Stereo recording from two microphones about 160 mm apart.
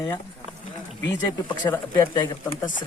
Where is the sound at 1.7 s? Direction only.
20° left (ahead or behind).